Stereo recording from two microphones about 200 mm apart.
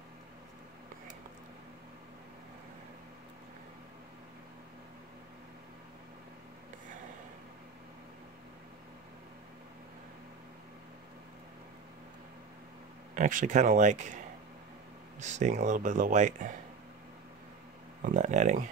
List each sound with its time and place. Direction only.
13.1 s speech: 40° right (ahead or behind)
18.0 s speech: 35° right (ahead or behind)